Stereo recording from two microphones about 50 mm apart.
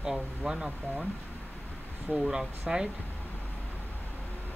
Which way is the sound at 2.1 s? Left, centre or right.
Centre.